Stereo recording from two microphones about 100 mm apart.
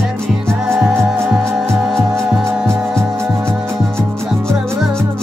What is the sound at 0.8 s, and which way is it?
Music, 5° right (ahead or behind).